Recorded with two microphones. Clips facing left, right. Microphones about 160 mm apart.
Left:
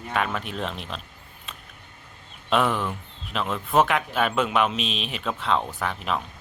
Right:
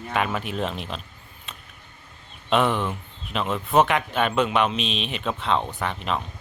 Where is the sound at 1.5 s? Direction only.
Centre (ahead or behind).